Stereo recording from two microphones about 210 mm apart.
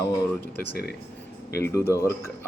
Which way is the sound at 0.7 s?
50° left (ahead or behind).